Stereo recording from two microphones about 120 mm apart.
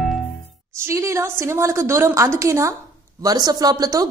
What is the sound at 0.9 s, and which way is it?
A woman's voice, 25° right (ahead or behind).